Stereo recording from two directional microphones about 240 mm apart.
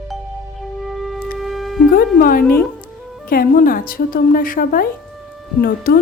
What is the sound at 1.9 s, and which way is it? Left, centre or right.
Music, left.